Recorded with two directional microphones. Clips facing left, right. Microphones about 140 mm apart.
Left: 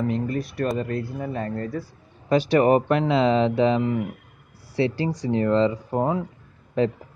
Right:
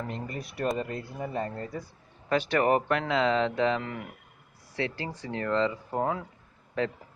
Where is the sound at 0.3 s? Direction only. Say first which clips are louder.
Left 5 dB; 20° right (ahead or behind).